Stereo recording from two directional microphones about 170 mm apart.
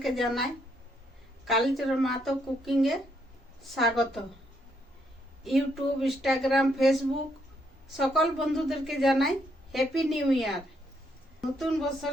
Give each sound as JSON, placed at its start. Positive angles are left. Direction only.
{"t": 0.0, "sound": "speech", "side_deg": 0}
{"t": 5.4, "sound": "speech", "side_deg": 0}
{"t": 7.9, "sound": "speech", "side_deg": 0}